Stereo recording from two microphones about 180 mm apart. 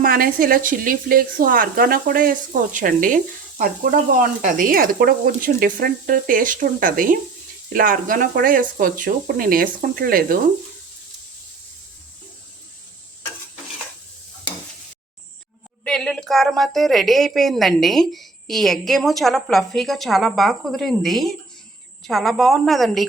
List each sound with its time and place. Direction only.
0.0 s speech: 55° right (ahead or behind)
4.4 s speech: 50° right (ahead or behind)
15.8 s a woman's voice: 5° left (ahead or behind)